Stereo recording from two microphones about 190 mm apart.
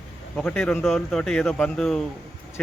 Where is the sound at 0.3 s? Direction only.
5° left (ahead or behind).